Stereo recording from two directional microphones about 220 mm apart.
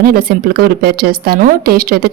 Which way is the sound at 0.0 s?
40° right (ahead or behind).